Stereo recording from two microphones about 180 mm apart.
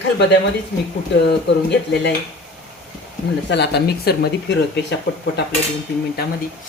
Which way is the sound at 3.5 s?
70° left (ahead or behind).